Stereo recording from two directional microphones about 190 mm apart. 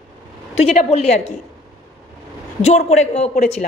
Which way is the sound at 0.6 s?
35° left (ahead or behind).